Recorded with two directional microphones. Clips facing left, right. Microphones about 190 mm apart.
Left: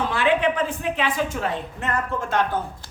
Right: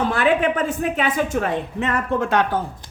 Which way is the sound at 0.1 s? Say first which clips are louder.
Right 2 dB; 45° right (ahead or behind).